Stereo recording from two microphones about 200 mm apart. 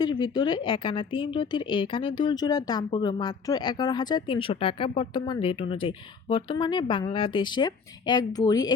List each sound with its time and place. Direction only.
0.0 s speech: 20° left (ahead or behind)